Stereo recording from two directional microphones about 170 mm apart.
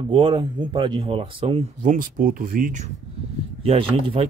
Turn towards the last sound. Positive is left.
turn(degrees=-30)  # may be behind; listen again after turning